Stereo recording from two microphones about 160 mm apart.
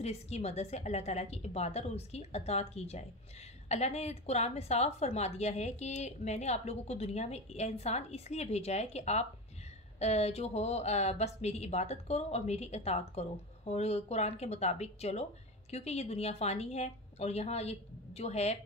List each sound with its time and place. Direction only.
0.0 s a woman's voice: 40° left (ahead or behind)